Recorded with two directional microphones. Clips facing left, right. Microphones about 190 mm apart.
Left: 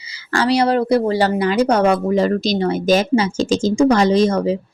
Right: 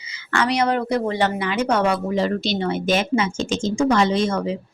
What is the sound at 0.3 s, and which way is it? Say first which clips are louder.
A woman's voice: left 4 dB; 35° left (ahead or behind).